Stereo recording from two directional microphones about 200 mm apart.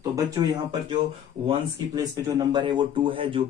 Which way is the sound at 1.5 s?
20° right (ahead or behind).